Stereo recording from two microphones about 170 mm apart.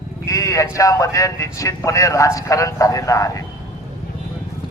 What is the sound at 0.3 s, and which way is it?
A man's voice, 20° left (ahead or behind).